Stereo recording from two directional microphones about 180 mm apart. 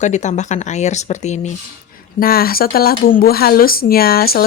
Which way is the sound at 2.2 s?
55° left (ahead or behind).